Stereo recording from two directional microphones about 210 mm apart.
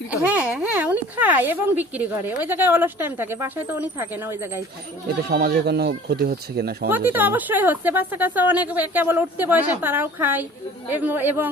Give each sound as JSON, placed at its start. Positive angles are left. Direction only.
{"t": 0.2, "sound": "speech", "side_deg": -5}
{"t": 5.3, "sound": "speech", "side_deg": -50}
{"t": 6.9, "sound": "speech", "side_deg": -10}